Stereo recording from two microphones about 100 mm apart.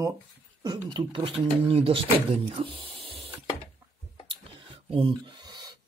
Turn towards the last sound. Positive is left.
turn(degrees=-45)  # may be behind; listen again after turning